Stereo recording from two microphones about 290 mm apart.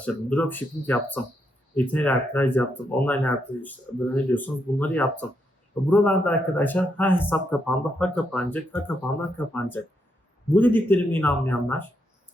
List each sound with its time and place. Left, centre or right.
0.0 s a man's voice: centre